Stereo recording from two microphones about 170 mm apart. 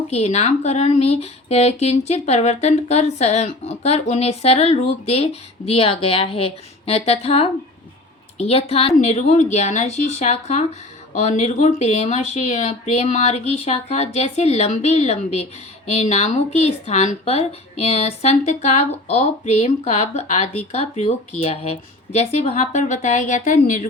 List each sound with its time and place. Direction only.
0.1 s speech: 40° left (ahead or behind)